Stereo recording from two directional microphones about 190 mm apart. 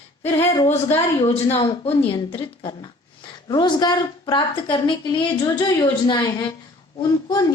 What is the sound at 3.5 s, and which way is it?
A woman's voice, 25° left (ahead or behind).